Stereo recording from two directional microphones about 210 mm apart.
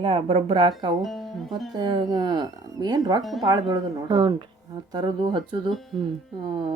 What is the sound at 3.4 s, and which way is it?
Speech, 20° right (ahead or behind).